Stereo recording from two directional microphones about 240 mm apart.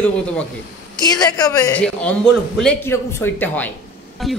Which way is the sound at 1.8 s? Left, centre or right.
Centre.